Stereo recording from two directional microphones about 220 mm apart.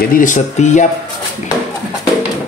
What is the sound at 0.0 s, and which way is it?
Speech, 40° left (ahead or behind).